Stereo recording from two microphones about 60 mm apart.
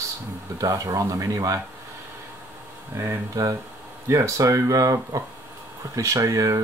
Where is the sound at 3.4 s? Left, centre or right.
Right.